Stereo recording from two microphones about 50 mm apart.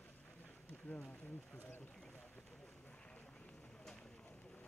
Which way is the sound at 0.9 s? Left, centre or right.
Left.